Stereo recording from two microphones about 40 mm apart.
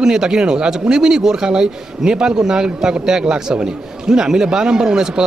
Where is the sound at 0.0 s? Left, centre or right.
Centre.